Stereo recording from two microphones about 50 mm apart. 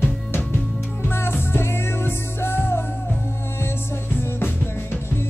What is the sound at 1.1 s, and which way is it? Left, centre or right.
Music, left.